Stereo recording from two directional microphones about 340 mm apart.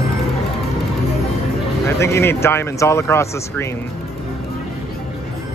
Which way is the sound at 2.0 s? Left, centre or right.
Centre.